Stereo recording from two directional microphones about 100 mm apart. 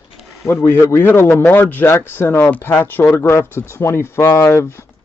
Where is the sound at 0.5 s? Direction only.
25° left (ahead or behind).